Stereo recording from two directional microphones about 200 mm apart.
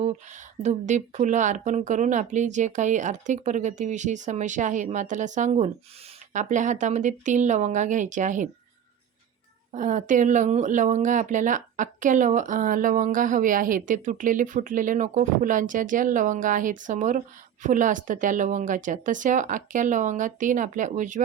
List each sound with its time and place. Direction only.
0.0 s speech: 35° right (ahead or behind)
9.7 s speech: 40° right (ahead or behind)